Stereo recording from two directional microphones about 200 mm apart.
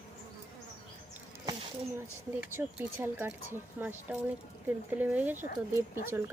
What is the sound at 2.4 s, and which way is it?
Speech, 10° right (ahead or behind).